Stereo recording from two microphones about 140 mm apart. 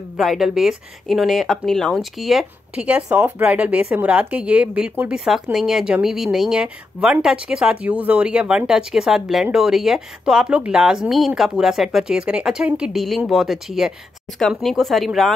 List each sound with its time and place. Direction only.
0.2 s speech: centre (ahead or behind)